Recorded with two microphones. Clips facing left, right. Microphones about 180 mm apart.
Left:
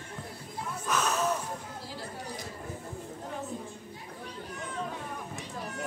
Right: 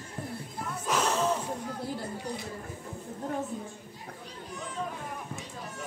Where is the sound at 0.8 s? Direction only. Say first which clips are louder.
Right 2 dB; 25° right (ahead or behind).